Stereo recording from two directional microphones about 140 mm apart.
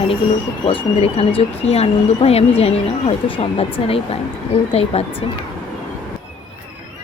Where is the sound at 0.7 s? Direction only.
40° left (ahead or behind).